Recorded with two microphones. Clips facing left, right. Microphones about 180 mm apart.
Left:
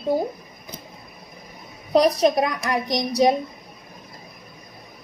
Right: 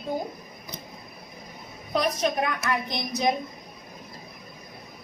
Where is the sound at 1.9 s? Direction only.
35° left (ahead or behind).